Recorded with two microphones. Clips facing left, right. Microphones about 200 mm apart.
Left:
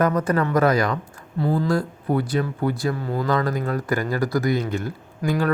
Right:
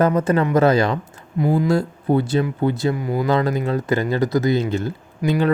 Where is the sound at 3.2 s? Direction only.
25° right (ahead or behind).